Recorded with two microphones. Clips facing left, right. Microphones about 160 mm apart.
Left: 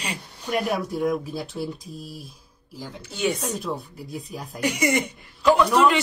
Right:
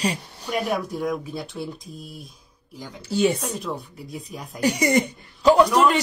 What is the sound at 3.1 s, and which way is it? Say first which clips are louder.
Speech: right 5 dB; 30° right (ahead or behind).